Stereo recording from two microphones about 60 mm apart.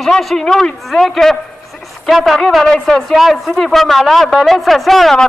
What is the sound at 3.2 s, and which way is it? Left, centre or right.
Speech, centre.